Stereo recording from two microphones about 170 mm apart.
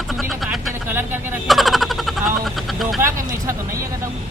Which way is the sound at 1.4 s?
Centre (ahead or behind).